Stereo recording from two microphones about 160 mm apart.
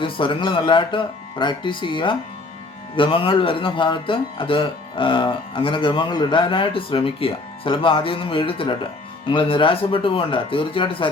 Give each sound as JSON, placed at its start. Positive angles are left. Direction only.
{"t": 0.0, "sound": "speech", "side_deg": 30}